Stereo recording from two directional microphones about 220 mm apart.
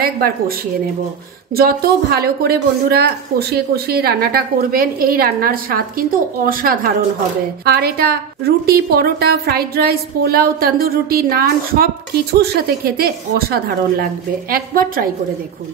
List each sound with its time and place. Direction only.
0.0 s a woman's voice: 45° right (ahead or behind)